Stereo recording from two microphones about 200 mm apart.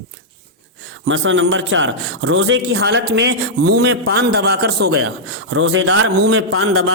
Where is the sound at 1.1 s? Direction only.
70° right (ahead or behind); by 4.9 s 55° right (ahead or behind).